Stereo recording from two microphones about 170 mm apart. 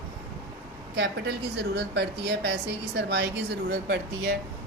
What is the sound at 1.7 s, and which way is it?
A woman's voice, 80° right.